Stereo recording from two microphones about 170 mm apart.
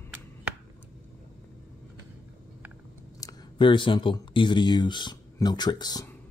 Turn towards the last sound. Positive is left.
turn(degrees=25)  # may be behind; listen again after turning